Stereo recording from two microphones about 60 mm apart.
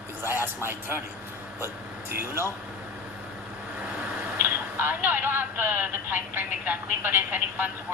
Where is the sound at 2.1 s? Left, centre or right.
Right.